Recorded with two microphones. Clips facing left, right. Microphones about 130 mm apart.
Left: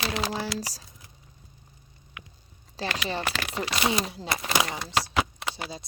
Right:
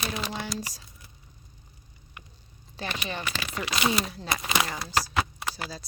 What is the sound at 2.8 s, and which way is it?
Speech, 35° left (ahead or behind).